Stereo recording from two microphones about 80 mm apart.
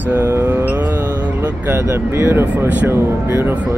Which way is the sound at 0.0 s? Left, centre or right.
Right.